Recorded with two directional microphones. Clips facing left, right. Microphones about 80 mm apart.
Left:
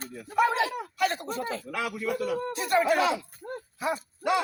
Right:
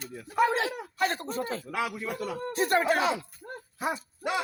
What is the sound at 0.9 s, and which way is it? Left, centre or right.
Speech, right.